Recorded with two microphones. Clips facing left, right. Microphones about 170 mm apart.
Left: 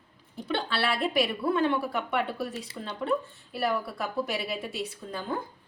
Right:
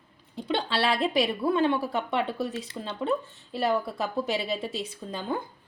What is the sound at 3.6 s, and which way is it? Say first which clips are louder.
A woman's voice: right 3 dB; 25° right (ahead or behind).